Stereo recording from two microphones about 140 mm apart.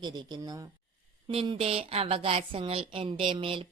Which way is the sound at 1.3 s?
45° right (ahead or behind).